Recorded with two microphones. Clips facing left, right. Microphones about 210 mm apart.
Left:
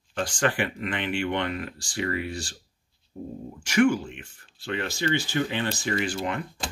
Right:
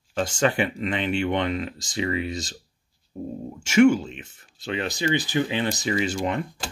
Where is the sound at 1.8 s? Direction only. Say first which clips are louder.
Right 3 dB; 20° right (ahead or behind).